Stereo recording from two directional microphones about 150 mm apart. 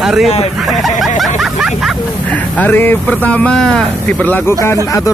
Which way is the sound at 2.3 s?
10° left (ahead or behind).